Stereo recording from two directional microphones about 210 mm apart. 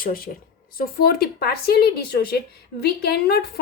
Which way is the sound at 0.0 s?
40° left (ahead or behind).